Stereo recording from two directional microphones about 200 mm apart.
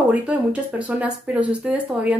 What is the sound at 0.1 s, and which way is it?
A woman's voice, 5° right (ahead or behind).